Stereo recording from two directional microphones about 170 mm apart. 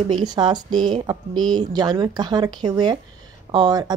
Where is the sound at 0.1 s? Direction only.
25° right (ahead or behind).